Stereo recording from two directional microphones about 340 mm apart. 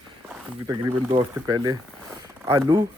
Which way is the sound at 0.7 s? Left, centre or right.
Centre.